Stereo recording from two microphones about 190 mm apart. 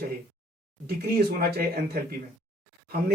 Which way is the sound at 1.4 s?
55° right (ahead or behind).